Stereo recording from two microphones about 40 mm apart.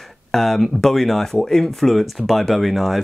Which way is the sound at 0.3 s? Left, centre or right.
Centre.